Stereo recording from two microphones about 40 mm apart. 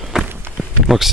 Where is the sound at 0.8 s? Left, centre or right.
Centre.